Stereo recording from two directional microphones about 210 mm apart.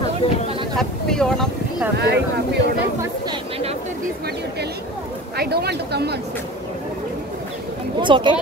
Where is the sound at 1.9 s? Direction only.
55° right (ahead or behind).